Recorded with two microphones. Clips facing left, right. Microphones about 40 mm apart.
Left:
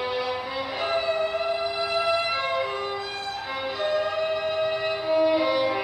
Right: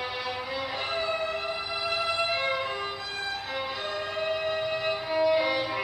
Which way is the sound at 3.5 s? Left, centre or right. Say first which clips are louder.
Left 4 dB; centre.